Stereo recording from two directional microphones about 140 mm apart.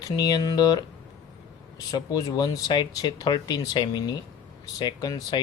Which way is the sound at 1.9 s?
25° left (ahead or behind).